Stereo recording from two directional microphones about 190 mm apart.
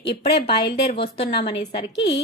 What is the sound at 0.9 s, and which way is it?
Speech, 30° left (ahead or behind).